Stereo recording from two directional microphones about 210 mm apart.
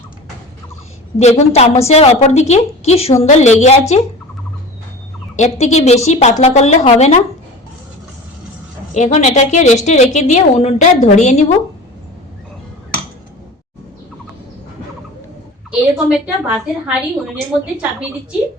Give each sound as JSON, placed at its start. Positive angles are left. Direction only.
{"t": 1.2, "sound": "a woman's voice", "side_deg": 30}
{"t": 5.4, "sound": "a woman's voice", "side_deg": 30}
{"t": 9.0, "sound": "a woman's voice", "side_deg": 35}
{"t": 15.7, "sound": "a woman's voice", "side_deg": -5}